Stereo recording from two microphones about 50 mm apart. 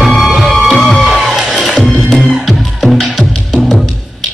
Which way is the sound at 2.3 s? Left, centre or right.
Centre.